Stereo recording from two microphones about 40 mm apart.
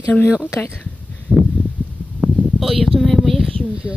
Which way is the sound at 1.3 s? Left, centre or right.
Right.